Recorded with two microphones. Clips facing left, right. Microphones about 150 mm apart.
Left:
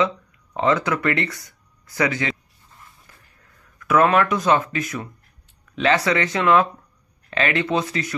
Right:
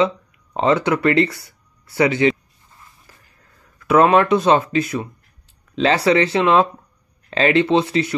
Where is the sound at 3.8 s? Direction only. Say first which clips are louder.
Right 4 dB; 30° right (ahead or behind).